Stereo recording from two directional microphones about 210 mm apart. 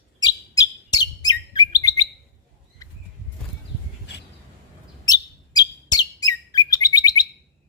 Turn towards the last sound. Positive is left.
turn(degrees=20)  # may be behind; listen again after turning